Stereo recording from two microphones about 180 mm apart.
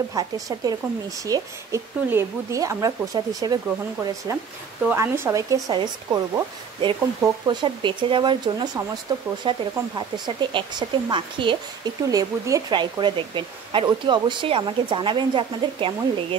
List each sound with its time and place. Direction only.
0.1 s speech: 20° right (ahead or behind)